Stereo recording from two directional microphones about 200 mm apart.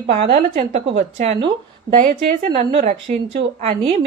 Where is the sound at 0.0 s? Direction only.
30° right (ahead or behind).